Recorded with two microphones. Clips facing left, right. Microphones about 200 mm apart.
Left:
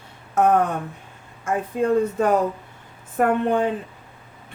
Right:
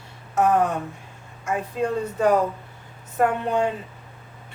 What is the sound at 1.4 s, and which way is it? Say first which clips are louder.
Speech: left 4 dB; 55° left (ahead or behind).